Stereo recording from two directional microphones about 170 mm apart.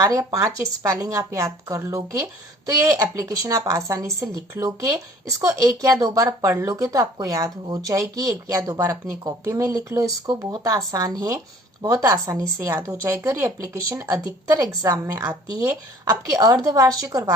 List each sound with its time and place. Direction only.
0.0 s speech: 20° right (ahead or behind)
3.2 s speech: 20° right (ahead or behind)